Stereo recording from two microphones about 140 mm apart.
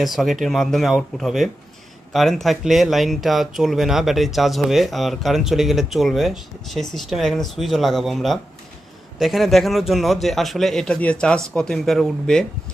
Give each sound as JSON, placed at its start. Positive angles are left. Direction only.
{"t": 0.0, "sound": "speech", "side_deg": 0}